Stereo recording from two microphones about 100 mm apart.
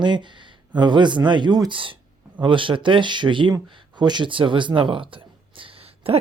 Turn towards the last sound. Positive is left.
turn(degrees=-75)  # may be behind; listen again after turning